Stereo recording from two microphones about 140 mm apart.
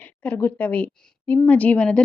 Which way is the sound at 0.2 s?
15° left (ahead or behind).